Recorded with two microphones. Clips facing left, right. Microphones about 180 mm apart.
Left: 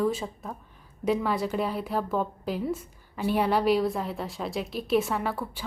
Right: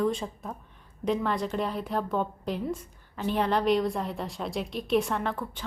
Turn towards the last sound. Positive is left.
turn(degrees=10)  # may be behind; listen again after turning